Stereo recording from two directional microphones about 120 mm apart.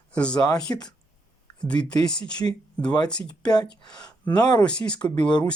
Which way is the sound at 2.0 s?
5° left (ahead or behind).